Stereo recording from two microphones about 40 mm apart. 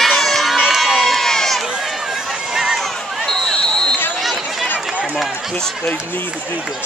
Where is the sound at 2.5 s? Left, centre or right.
Centre.